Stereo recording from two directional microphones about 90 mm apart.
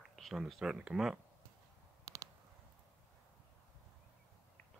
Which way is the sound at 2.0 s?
35° right (ahead or behind).